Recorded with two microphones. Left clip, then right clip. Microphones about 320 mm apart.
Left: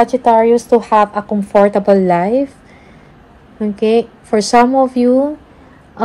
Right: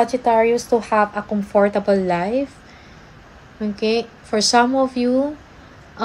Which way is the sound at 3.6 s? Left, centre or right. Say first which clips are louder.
Left 7 dB; centre.